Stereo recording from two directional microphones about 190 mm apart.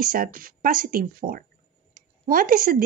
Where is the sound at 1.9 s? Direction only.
45° right (ahead or behind).